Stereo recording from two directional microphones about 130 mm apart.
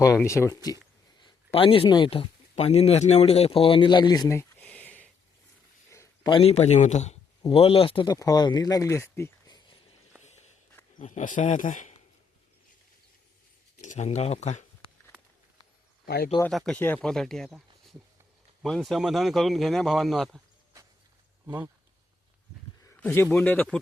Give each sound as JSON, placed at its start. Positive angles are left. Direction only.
{"t": 0.0, "sound": "speech", "side_deg": 20}
{"t": 1.5, "sound": "speech", "side_deg": 45}
{"t": 4.3, "sound": "a sound", "side_deg": 20}
{"t": 5.9, "sound": "a sound", "side_deg": 20}
{"t": 6.3, "sound": "a man's voice", "side_deg": 50}
{"t": 7.5, "sound": "speech", "side_deg": 50}
{"t": 8.0, "sound": "speech", "side_deg": 25}
{"t": 9.5, "sound": "a sound", "side_deg": 30}
{"t": 10.9, "sound": "speech", "side_deg": 75}
{"t": 13.8, "sound": "a man's voice", "side_deg": 65}
{"t": 16.5, "sound": "speech", "side_deg": 0}
{"t": 21.4, "sound": "speech", "side_deg": -15}
{"t": 22.9, "sound": "a man's voice", "side_deg": 15}